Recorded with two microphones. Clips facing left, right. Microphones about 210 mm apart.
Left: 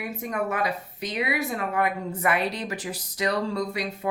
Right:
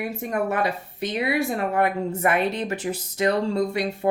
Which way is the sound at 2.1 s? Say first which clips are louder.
Right 2 dB; 50° right (ahead or behind).